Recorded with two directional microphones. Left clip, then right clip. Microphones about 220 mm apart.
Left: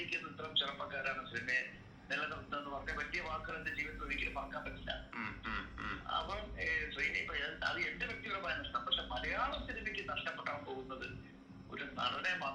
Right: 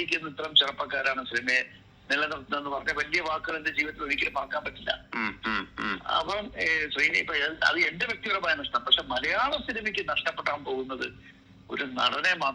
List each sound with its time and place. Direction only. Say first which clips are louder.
0.0 s a man's voice: right 11 dB; 50° right (ahead or behind)